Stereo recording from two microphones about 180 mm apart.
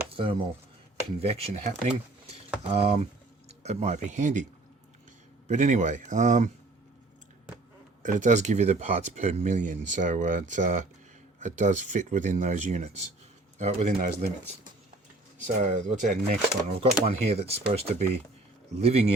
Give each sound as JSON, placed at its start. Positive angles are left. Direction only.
{"t": 0.1, "sound": "a sound", "side_deg": -30}
{"t": 1.2, "sound": "speech", "side_deg": -35}
{"t": 2.7, "sound": "speech", "side_deg": -35}
{"t": 5.5, "sound": "speech", "side_deg": -40}
{"t": 8.0, "sound": "speech", "side_deg": -45}
{"t": 15.4, "sound": "speech", "side_deg": -45}